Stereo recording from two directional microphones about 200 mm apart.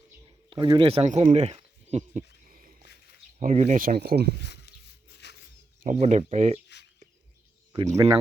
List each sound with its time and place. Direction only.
0.3 s a sound: 25° right (ahead or behind); by 2.8 s 45° right (ahead or behind)
3.3 s speech: 35° right (ahead or behind); by 4.3 s 55° right (ahead or behind)
4.4 s a sound: 55° left (ahead or behind)
5.2 s wild animals: 60° left (ahead or behind)
5.8 s speech: 40° right (ahead or behind)
7.9 s speech: 15° right (ahead or behind)